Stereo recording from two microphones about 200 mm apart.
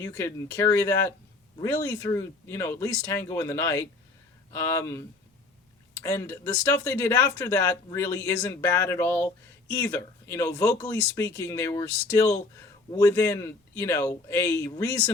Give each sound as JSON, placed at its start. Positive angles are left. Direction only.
{"t": 0.0, "sound": "speech", "side_deg": 15}